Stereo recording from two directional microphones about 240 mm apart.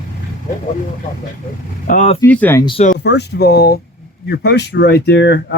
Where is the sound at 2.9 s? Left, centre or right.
Left.